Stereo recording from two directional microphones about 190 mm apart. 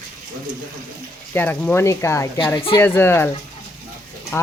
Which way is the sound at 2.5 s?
30° left (ahead or behind).